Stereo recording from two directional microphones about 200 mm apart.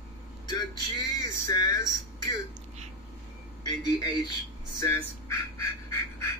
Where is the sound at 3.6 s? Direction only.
20° left (ahead or behind).